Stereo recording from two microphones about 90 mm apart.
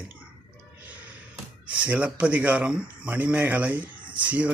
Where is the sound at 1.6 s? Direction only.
15° right (ahead or behind).